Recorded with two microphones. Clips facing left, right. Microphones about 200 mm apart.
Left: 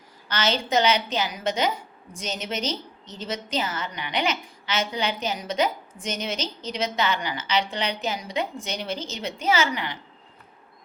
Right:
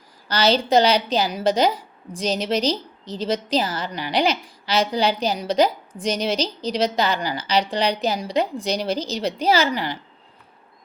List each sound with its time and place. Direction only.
0.3 s a woman's voice: 35° right (ahead or behind)